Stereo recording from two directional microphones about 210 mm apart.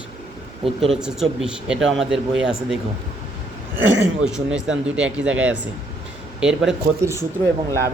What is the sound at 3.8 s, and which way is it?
Speech, 60° right (ahead or behind).